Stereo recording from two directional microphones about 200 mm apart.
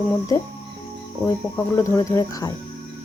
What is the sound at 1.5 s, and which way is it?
Speech, 10° left (ahead or behind).